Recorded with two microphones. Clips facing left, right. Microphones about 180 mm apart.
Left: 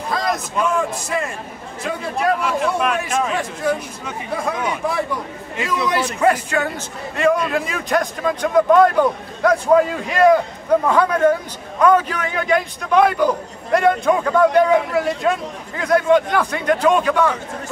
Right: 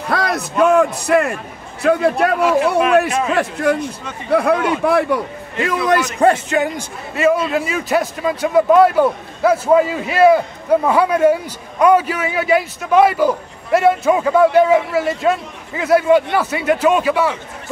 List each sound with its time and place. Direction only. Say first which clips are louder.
0.1 s a sound: right 3 dB; 65° right (ahead or behind)
1.8 s a man's voice: right 11 dB; 65° right (ahead or behind)
2.1 s a man's voice: right 5 dB; 5° right (ahead or behind)
3.3 s speech: right 4 dB; 65° right (ahead or behind)
5.9 s a man's voice: right 4 dB; 40° right (ahead or behind)
6.3 s a man's voice: right 3 dB; 20° right (ahead or behind)
7.2 s a man's voice: right 2 dB; 5° right (ahead or behind)